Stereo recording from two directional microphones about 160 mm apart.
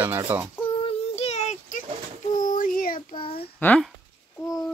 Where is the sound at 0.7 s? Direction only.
35° left (ahead or behind).